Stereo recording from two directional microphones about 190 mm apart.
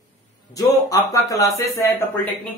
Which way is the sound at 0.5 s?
20° left (ahead or behind).